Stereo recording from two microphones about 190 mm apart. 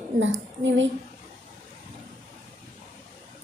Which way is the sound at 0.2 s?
80° right.